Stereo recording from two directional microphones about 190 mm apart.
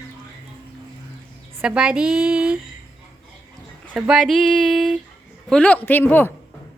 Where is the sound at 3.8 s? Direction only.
5° right (ahead or behind).